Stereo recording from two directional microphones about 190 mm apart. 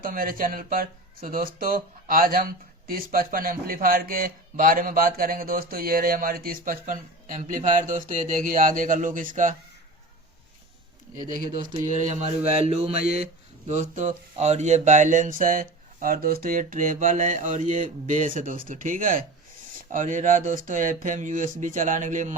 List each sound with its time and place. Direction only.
0.0 s speech: 50° right (ahead or behind)
11.3 s speech: 40° right (ahead or behind)